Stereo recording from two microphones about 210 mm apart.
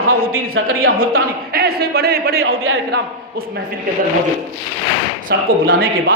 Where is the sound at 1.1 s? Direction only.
45° right (ahead or behind).